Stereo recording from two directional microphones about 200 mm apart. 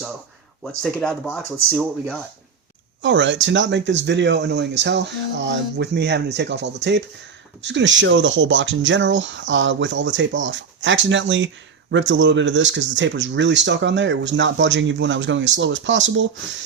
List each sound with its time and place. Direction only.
0.8 s speech: 5° left (ahead or behind)
3.0 s speech: 65° right (ahead or behind)